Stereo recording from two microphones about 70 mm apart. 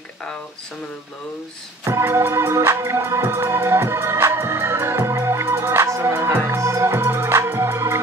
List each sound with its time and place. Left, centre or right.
1.9 s music: right